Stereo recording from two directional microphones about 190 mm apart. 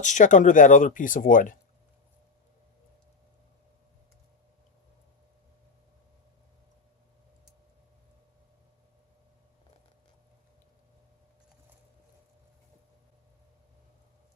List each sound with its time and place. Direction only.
0.0 s speech: 40° left (ahead or behind)